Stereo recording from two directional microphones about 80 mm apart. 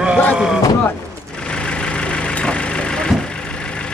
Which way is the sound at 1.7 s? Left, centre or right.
Centre.